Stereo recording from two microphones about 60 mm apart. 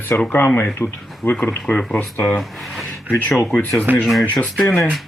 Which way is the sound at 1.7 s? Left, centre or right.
Left.